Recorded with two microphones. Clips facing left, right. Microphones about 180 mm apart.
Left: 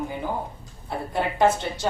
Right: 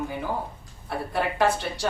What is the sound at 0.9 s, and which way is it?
Speech, 20° left (ahead or behind).